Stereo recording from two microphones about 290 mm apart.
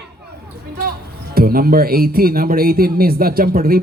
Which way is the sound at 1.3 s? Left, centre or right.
Right.